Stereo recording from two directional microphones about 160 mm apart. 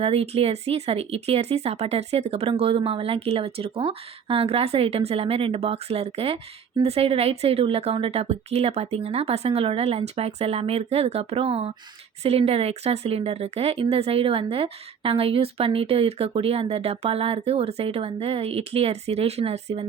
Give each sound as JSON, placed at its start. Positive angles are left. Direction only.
{"t": 0.0, "sound": "speech", "side_deg": -40}